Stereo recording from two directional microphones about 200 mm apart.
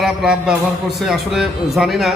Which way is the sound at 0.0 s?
Centre (ahead or behind).